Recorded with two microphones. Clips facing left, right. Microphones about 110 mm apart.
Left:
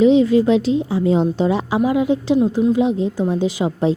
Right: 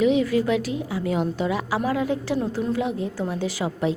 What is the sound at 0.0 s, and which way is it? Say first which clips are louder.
A woman's voice: left 7 dB; 25° left (ahead or behind).